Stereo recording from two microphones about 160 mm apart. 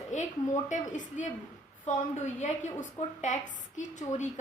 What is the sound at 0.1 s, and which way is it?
A woman's voice, 50° left (ahead or behind).